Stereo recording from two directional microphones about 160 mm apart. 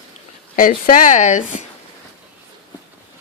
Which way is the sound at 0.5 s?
60° left (ahead or behind).